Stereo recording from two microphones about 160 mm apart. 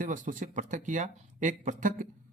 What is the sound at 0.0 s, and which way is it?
Speech, 55° right (ahead or behind).